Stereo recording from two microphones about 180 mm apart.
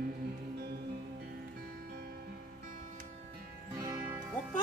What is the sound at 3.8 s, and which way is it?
Music, 20° right (ahead or behind).